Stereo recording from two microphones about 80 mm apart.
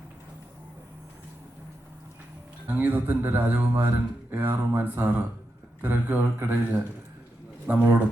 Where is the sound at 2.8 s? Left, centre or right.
Right.